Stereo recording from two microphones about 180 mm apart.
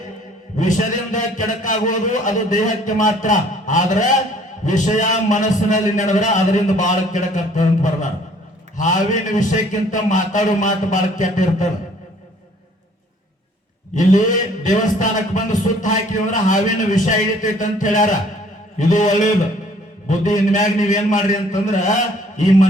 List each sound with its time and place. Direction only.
0.6 s a man's voice: 45° left (ahead or behind)
13.9 s a man's voice: 45° left (ahead or behind)